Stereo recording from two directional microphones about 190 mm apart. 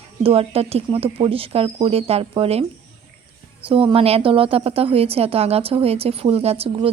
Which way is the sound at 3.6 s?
30° right (ahead or behind).